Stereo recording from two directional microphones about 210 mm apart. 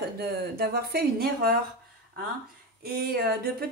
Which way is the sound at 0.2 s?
50° right (ahead or behind).